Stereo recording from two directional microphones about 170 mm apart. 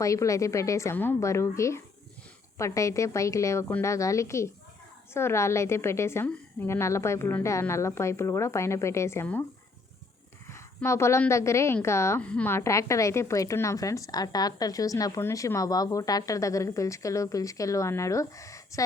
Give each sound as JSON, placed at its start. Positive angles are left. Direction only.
{"t": 0.0, "sound": "a woman's voice", "side_deg": 20}
{"t": 10.5, "sound": "a woman's voice", "side_deg": 15}